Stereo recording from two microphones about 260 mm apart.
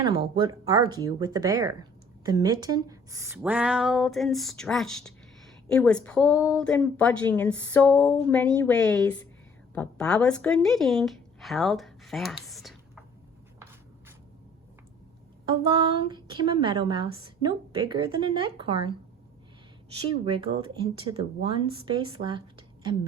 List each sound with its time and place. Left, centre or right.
0.0 s a woman's voice: centre
15.4 s a woman's voice: centre
20.1 s a woman's voice: centre